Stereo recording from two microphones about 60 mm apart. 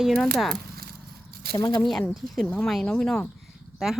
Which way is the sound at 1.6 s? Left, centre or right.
Left.